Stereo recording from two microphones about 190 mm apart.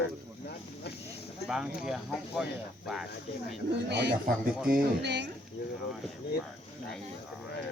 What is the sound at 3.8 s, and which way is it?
Speech, 60° right (ahead or behind).